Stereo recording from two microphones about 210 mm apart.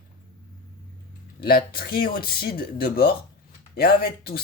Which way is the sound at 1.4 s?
45° left (ahead or behind).